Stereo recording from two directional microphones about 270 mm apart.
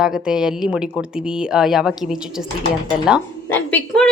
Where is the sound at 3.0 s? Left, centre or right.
Centre.